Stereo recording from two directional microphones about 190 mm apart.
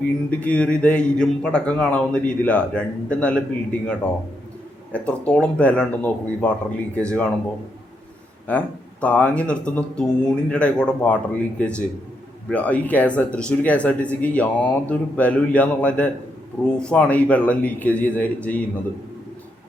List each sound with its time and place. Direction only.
0.3 s a man's voice: 5° left (ahead or behind)
8.4 s a man's voice: 10° left (ahead or behind)